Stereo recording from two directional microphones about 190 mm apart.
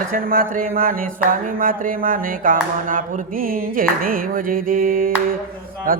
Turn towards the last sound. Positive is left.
turn(degrees=-50)  # may be behind; listen again after turning